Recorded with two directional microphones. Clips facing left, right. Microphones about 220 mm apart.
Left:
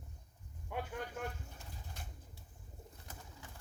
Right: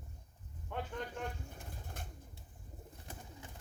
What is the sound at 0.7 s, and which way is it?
Speech, 10° left (ahead or behind).